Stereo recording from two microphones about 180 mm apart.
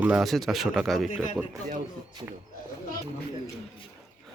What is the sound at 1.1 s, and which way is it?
Speech, 45° left (ahead or behind).